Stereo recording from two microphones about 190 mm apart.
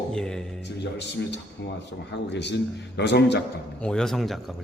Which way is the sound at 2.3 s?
65° left (ahead or behind).